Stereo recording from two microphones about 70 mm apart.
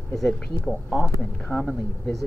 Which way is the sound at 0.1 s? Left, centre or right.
Centre.